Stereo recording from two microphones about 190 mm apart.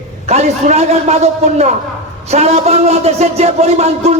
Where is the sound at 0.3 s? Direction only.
35° right (ahead or behind).